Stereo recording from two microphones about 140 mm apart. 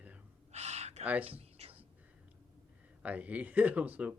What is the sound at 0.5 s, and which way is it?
Gasp, 50° right (ahead or behind).